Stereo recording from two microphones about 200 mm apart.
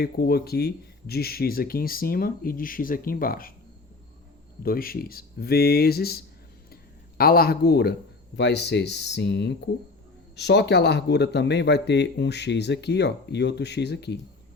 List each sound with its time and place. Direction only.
0.0 s speech: 50° left (ahead or behind)
4.6 s speech: 45° left (ahead or behind)
7.2 s speech: 50° left (ahead or behind)